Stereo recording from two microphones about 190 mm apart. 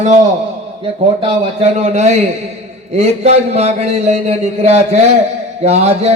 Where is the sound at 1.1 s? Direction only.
30° right (ahead or behind).